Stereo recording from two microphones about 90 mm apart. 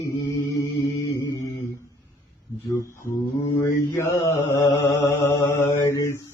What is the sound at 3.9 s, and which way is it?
Mantra, 30° left (ahead or behind).